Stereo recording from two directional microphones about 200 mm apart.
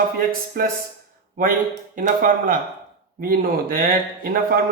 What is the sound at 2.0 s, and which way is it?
Speech, 45° right (ahead or behind).